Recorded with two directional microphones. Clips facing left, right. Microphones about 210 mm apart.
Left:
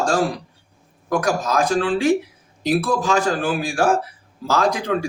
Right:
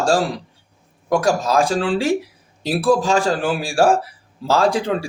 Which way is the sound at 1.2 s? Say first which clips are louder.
Right 2 dB; 30° right (ahead or behind).